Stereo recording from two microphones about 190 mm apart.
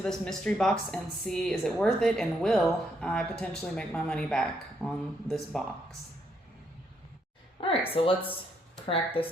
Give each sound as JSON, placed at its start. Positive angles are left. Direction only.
{"t": 0.0, "sound": "speech", "side_deg": 5}
{"t": 7.6, "sound": "speech", "side_deg": 30}
{"t": 9.2, "sound": "speech", "side_deg": 30}